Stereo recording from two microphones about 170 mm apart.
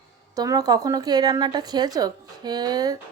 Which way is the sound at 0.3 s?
20° right (ahead or behind).